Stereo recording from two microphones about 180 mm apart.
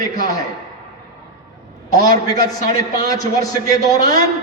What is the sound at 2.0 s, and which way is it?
A man's voice, 20° left (ahead or behind).